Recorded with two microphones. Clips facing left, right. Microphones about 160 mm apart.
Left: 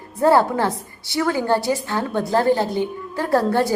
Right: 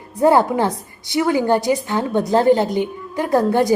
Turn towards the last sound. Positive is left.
turn(degrees=-15)  # may be behind; listen again after turning